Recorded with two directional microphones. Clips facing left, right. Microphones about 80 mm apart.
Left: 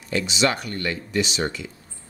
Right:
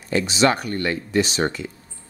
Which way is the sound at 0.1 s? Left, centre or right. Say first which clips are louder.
Right 4 dB; right.